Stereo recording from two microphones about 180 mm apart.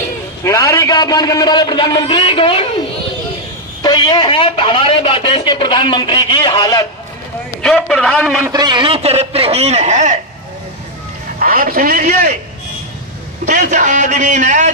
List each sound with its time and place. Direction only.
0.4 s speech: 15° left (ahead or behind)
3.8 s speech: 25° left (ahead or behind)
7.6 s a man's voice: 5° left (ahead or behind)
8.5 s a man's voice: 25° right (ahead or behind); by 10.2 s 40° right (ahead or behind)
11.3 s a man's voice: 50° right (ahead or behind)
13.5 s a man's voice: 45° right (ahead or behind)